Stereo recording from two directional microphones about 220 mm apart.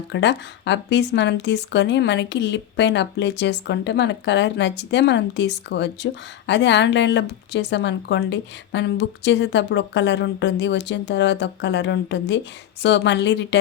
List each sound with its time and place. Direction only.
0.1 s speech: 50° left (ahead or behind)